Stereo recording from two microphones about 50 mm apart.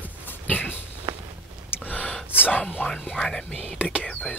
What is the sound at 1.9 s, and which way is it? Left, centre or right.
Gasp, left.